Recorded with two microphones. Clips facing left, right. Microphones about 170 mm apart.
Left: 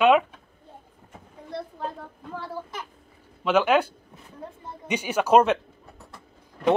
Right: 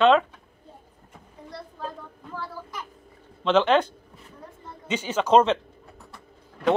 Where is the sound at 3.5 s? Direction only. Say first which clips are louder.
Right 1 dB; 10° left (ahead or behind).